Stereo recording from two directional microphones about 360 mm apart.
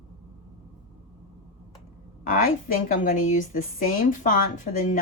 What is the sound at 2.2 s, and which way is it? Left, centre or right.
A woman's voice, left.